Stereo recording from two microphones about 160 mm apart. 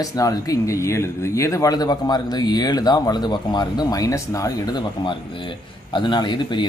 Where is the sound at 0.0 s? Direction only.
20° left (ahead or behind).